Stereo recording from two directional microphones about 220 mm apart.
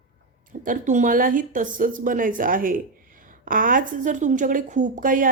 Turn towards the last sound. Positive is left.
turn(degrees=-35)  # may be behind; listen again after turning